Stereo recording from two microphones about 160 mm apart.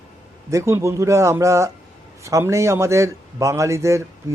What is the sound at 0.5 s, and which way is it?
A man's voice, 15° right (ahead or behind).